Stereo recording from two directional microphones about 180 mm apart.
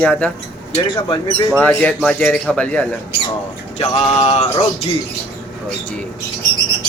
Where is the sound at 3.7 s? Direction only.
35° left (ahead or behind).